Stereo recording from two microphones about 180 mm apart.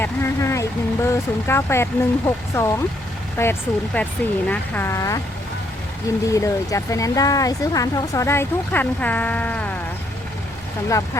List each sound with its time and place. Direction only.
0.0 s speech: 15° left (ahead or behind)
10.8 s speech: 15° left (ahead or behind)